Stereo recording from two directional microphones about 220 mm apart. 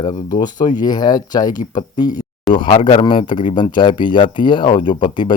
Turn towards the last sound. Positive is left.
turn(degrees=20)  # may be behind; listen again after turning